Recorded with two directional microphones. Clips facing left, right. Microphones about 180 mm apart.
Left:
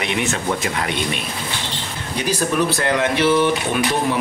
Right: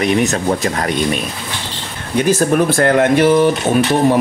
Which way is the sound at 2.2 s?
50° right (ahead or behind).